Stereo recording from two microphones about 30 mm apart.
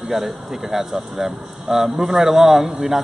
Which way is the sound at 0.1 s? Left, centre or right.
Centre.